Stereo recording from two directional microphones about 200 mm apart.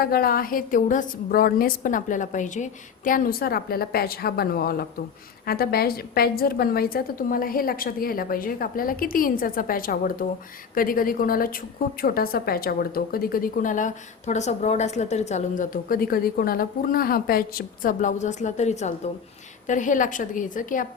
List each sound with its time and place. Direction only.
0.0 s a woman's voice: 50° left (ahead or behind)